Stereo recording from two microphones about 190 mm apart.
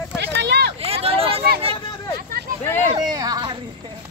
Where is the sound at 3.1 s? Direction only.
20° right (ahead or behind).